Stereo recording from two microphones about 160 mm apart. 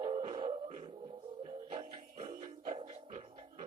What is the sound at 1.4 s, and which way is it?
Music, 40° right (ahead or behind).